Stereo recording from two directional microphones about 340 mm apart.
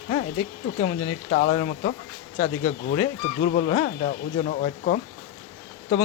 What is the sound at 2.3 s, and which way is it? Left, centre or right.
Speech, centre.